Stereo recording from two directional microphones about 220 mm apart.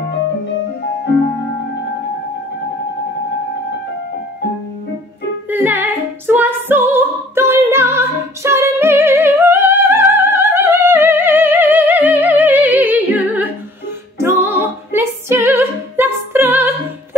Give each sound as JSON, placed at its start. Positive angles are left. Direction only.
{"t": 5.5, "sound": "music", "side_deg": -10}